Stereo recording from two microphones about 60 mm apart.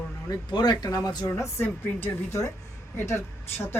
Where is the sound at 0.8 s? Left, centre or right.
Left.